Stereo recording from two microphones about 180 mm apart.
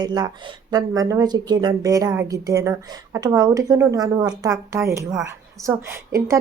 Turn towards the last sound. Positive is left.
turn(degrees=-15)  # may be behind; listen again after turning